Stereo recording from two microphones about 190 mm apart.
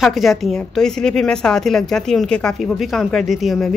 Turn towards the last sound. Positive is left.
turn(degrees=0)  # may be behind; listen again after turning